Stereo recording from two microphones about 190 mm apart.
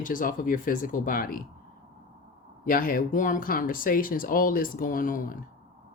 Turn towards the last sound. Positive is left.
turn(degrees=45)  # may be behind; listen again after turning